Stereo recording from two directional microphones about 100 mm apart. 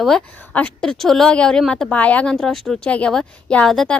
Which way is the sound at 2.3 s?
5° left (ahead or behind).